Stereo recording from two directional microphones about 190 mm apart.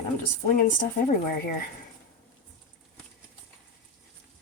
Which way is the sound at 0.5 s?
45° left (ahead or behind).